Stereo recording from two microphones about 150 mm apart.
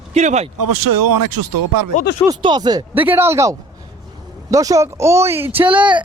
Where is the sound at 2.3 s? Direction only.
30° right (ahead or behind).